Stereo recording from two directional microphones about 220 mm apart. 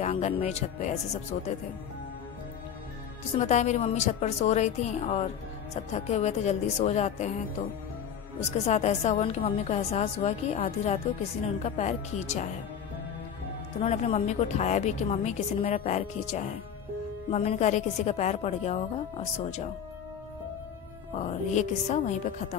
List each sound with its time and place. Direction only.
0.0 s a woman's voice: 30° left (ahead or behind)
3.3 s a woman's voice: 30° left (ahead or behind)
8.4 s a woman's voice: 30° left (ahead or behind)
13.7 s a woman's voice: 30° left (ahead or behind)
21.2 s a woman's voice: 30° left (ahead or behind)